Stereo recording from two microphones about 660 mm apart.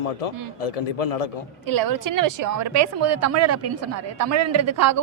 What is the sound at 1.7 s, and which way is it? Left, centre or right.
A woman's voice, right.